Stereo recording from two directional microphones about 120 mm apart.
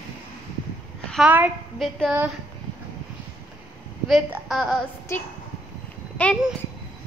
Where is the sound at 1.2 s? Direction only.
10° right (ahead or behind).